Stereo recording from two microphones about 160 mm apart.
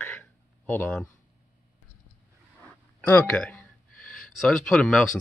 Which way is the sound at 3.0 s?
10° left (ahead or behind).